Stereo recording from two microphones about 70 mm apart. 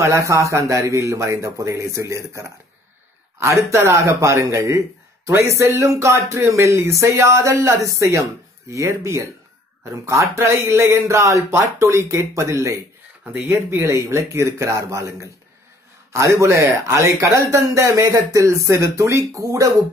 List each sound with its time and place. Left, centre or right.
0.0 s a man's voice: right
13.2 s a man's voice: right